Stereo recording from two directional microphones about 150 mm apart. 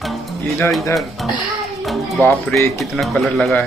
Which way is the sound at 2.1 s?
10° left (ahead or behind).